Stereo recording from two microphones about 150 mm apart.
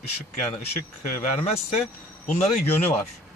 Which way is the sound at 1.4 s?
45° left (ahead or behind).